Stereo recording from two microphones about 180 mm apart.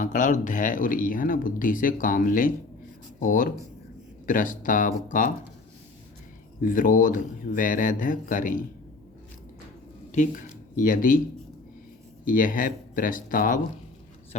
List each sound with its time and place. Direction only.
0.0 s speech: 45° left (ahead or behind)
6.6 s speech: 50° left (ahead or behind)
10.1 s speech: 45° left (ahead or behind)
12.2 s speech: 50° left (ahead or behind)